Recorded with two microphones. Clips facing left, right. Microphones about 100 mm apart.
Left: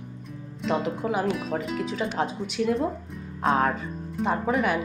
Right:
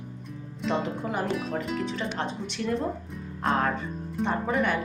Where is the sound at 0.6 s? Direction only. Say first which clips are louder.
Left 2 dB; centre (ahead or behind).